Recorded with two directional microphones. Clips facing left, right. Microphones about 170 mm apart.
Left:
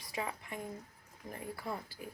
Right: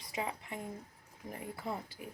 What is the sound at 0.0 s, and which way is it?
Speech, 20° right (ahead or behind).